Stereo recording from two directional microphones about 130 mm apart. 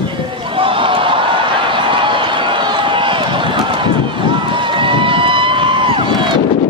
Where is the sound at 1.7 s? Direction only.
40° right (ahead or behind).